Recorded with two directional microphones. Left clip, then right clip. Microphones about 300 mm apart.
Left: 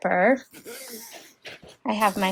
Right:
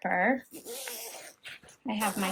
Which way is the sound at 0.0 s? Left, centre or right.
Centre.